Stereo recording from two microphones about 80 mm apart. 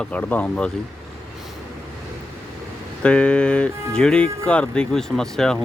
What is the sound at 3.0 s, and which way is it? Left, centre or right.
Speech, centre.